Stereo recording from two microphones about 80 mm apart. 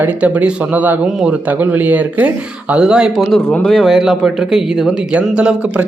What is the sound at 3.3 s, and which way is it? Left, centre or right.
Speech, centre.